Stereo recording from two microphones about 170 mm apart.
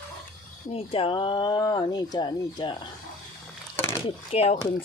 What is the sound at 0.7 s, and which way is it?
Speech, 35° left (ahead or behind).